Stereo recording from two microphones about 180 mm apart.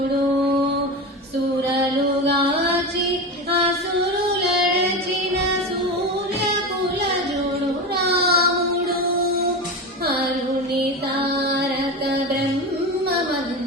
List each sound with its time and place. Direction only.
8.0 s child singing: 60° right (ahead or behind)